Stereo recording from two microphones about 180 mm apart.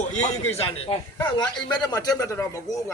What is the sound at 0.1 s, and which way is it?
A man's voice, 40° left (ahead or behind).